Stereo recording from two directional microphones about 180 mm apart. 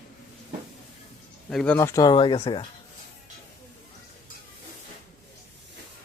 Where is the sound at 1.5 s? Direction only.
5° left (ahead or behind).